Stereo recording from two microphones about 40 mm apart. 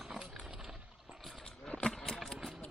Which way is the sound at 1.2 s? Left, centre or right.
Centre.